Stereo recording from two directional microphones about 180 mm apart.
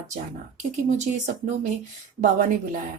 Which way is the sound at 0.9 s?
40° right (ahead or behind).